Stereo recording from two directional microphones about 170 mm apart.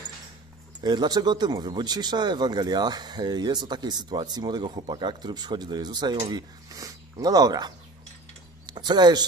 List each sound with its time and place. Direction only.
0.7 s speech: 25° right (ahead or behind)